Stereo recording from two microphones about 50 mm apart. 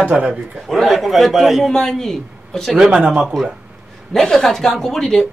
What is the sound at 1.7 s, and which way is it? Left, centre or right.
Speech, centre.